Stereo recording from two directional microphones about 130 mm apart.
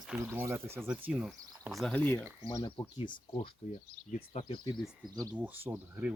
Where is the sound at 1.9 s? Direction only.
15° left (ahead or behind).